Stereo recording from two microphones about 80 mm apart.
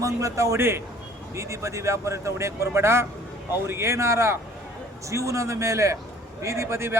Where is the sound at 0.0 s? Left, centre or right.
Right.